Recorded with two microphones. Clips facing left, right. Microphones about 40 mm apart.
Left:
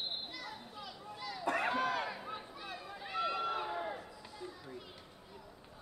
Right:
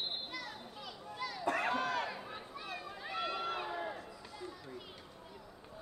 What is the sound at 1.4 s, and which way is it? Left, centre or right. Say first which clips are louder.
Crowd: left 1 dB; centre.